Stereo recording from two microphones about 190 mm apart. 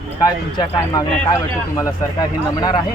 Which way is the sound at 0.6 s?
20° left (ahead or behind).